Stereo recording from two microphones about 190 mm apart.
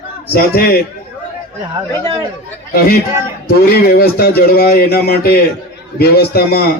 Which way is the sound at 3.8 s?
55° left (ahead or behind).